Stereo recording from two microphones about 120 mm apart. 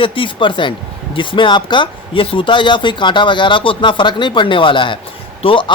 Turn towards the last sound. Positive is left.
turn(degrees=45)  # may be behind; listen again after turning